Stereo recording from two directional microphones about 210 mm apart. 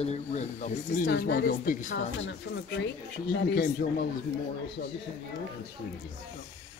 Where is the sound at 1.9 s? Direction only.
60° left (ahead or behind).